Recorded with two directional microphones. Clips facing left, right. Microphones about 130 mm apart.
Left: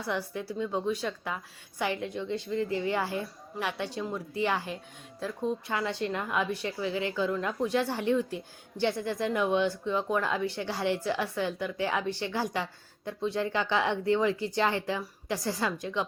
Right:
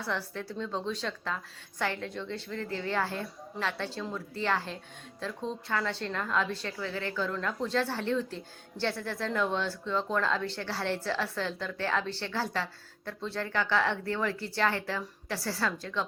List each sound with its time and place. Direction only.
0.0 s speech: 15° left (ahead or behind)